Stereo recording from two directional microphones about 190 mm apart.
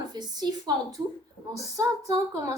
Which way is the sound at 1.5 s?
15° right (ahead or behind).